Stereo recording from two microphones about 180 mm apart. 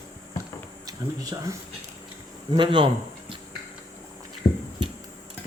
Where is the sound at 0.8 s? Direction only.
20° right (ahead or behind).